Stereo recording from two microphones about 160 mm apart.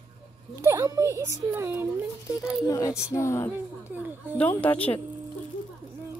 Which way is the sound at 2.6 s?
20° left (ahead or behind).